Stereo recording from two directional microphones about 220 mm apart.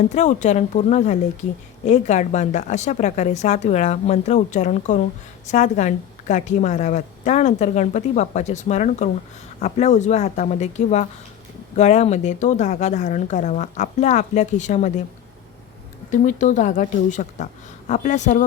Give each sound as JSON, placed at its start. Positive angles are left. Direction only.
{"t": 0.1, "sound": "a woman's voice", "side_deg": 35}
{"t": 16.1, "sound": "a woman's voice", "side_deg": 35}